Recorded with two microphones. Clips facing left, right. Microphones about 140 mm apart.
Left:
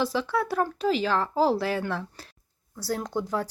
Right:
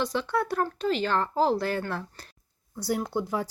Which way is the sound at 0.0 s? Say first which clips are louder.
Left 1 dB; centre (ahead or behind).